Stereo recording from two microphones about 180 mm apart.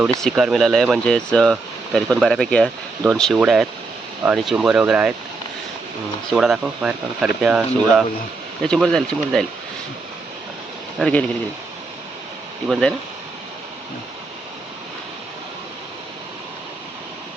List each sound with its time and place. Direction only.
0.2 s speech: centre (ahead or behind)
6.3 s speech: 5° right (ahead or behind)
10.9 s speech: 5° left (ahead or behind)
12.6 s speech: centre (ahead or behind)